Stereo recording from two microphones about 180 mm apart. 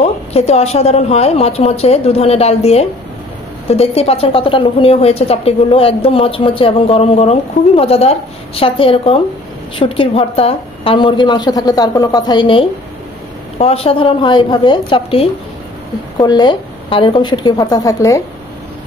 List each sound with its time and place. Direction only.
0.0 s a woman's voice: 35° left (ahead or behind); by 18.2 s 20° left (ahead or behind)